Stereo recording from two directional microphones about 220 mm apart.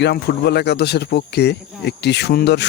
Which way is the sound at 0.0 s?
45° left (ahead or behind).